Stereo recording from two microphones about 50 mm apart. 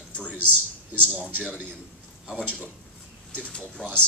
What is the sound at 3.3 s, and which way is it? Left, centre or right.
Speech, left.